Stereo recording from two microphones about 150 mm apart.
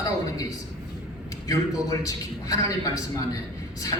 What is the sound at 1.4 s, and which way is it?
A man's voice, 25° left (ahead or behind).